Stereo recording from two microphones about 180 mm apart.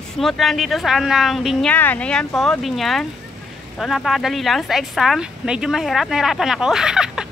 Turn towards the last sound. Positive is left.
turn(degrees=-5)  # may be behind; listen again after turning